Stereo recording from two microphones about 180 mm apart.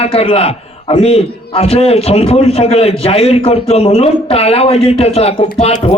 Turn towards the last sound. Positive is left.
turn(degrees=35)  # may be behind; listen again after turning